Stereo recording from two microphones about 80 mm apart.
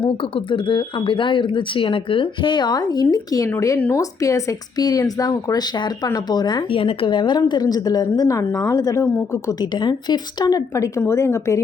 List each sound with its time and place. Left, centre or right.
0.5 s a woman's voice: left
9.7 s speech: left
10.5 s speech: left
11.0 s a woman's voice: left